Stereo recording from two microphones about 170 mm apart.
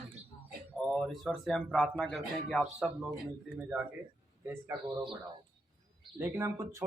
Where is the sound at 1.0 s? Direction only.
Centre (ahead or behind).